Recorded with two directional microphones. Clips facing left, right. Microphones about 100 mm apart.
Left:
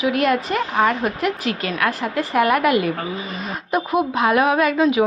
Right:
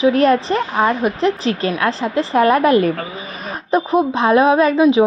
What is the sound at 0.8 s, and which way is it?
A woman's voice, 20° right (ahead or behind).